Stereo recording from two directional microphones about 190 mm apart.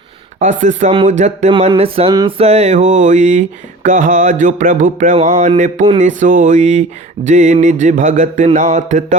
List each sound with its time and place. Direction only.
0.3 s mantra: 40° right (ahead or behind)